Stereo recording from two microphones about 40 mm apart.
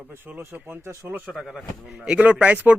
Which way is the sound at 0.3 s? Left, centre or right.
Right.